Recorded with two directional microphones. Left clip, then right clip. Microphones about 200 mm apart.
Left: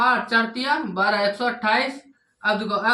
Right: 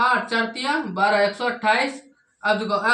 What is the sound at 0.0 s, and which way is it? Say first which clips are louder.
Speech: left 1 dB; 15° right (ahead or behind).